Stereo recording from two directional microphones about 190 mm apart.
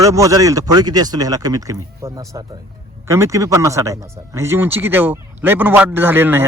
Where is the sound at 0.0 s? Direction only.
15° right (ahead or behind).